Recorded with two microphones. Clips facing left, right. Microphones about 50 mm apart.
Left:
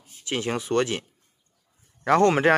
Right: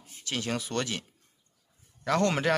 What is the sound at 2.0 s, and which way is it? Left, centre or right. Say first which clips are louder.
Speech: left 7 dB; left.